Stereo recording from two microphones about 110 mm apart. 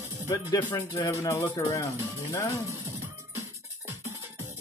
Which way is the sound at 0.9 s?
30° left (ahead or behind).